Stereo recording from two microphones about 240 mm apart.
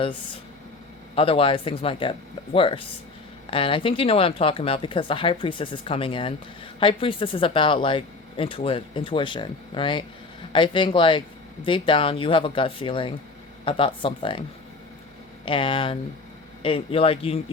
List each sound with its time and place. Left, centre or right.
1.1 s speech: left
15.4 s speech: left